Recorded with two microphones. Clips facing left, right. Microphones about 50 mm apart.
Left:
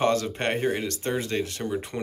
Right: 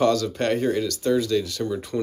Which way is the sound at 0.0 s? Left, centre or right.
Left.